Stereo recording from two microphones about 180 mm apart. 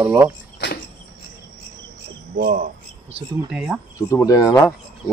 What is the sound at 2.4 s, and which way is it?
Speech, 60° right (ahead or behind).